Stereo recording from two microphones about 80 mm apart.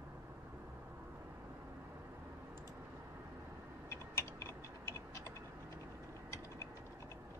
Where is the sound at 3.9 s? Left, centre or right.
Left.